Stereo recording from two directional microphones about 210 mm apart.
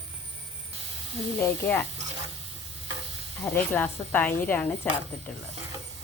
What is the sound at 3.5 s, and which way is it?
Speech, 10° left (ahead or behind).